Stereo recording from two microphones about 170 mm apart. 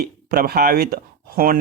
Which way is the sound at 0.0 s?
60° right (ahead or behind).